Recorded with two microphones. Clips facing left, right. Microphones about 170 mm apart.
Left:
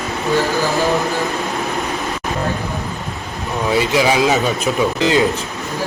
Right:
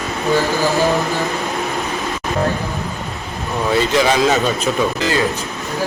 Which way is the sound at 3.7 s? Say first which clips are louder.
Even; 10° left (ahead or behind).